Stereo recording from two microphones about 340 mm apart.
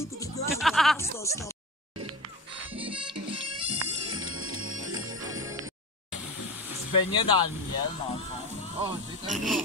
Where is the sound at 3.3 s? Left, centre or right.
Right.